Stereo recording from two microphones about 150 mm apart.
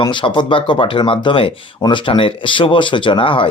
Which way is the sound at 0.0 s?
30° left (ahead or behind).